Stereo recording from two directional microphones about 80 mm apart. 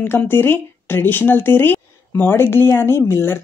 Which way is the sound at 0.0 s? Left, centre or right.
Left.